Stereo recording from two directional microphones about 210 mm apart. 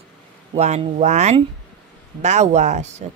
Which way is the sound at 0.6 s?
30° right (ahead or behind).